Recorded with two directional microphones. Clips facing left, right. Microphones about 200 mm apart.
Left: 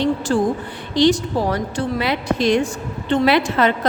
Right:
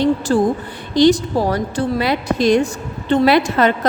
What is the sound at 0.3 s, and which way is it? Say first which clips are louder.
Speech: right 3 dB; 35° right (ahead or behind).